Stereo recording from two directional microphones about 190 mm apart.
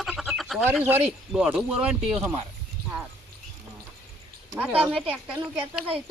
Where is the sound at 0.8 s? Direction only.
10° right (ahead or behind).